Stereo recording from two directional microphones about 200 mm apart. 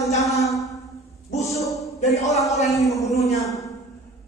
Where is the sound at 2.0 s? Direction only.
35° left (ahead or behind).